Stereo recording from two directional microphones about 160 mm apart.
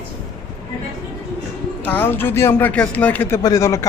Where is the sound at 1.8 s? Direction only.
10° left (ahead or behind).